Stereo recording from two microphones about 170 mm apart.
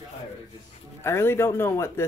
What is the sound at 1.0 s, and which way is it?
Speech, 15° left (ahead or behind).